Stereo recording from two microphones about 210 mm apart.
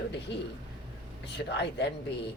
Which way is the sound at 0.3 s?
55° left (ahead or behind).